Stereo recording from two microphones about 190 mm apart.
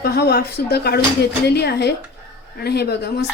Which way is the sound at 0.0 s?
55° left (ahead or behind).